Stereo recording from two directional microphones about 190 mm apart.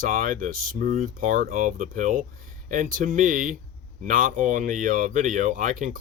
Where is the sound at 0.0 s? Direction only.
45° right (ahead or behind).